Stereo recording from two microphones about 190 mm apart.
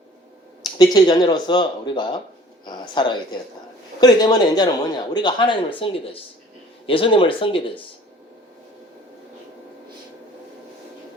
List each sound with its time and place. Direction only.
0.8 s speech: 25° left (ahead or behind)
2.6 s a sound: 25° left (ahead or behind)
4.0 s speech: 20° left (ahead or behind)